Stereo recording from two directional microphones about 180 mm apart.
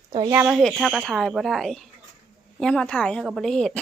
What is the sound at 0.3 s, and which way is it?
A woman's voice, centre (ahead or behind).